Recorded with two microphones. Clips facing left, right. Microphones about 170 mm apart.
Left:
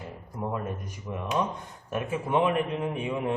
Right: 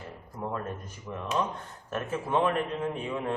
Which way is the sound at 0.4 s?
15° left (ahead or behind).